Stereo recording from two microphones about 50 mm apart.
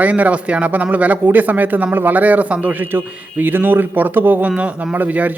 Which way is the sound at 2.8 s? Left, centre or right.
Right.